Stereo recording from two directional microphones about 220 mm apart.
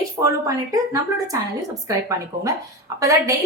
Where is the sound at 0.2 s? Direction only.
15° right (ahead or behind).